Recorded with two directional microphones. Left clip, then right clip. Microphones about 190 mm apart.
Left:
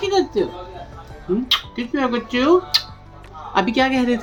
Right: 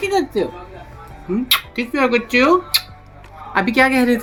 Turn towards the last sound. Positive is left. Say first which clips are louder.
# right 4 dB
turn(degrees=-15)  # may be behind; listen again after turning